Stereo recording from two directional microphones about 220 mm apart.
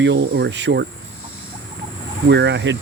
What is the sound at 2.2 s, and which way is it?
Speech, 55° right (ahead or behind).